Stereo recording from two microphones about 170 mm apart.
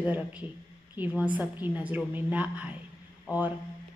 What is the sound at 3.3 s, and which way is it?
Speech, 20° left (ahead or behind).